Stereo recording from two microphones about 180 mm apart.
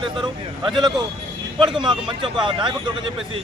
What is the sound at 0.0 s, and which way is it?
Speech, 25° right (ahead or behind).